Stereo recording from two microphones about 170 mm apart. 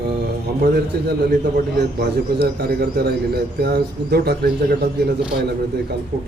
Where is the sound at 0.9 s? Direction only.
75° right (ahead or behind).